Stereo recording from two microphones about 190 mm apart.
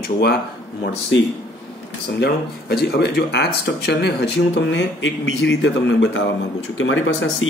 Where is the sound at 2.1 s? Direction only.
55° left (ahead or behind).